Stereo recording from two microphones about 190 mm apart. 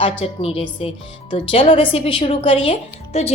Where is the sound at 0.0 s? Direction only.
30° left (ahead or behind).